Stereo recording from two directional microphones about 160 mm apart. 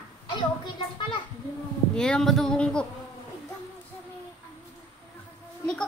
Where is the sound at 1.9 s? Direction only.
5° left (ahead or behind).